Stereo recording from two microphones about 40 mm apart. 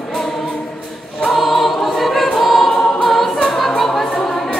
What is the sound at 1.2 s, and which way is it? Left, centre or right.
Choir, centre.